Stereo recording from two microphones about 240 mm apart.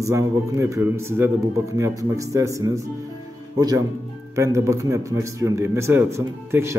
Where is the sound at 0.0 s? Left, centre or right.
Centre.